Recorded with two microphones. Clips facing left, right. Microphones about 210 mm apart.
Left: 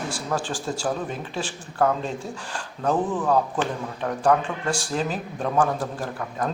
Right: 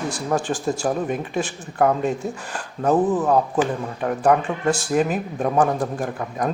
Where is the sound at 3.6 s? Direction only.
10° right (ahead or behind).